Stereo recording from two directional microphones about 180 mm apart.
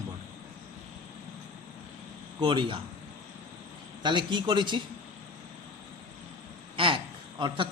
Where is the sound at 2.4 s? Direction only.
25° right (ahead or behind).